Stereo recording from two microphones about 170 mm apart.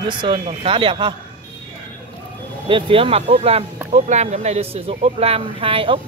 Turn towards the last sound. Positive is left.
turn(degrees=-30)  # may be behind; listen again after turning